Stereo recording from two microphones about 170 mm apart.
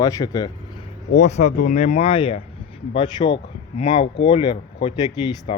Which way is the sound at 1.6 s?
40° left (ahead or behind).